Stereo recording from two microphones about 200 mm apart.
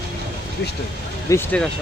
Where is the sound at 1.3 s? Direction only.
10° left (ahead or behind).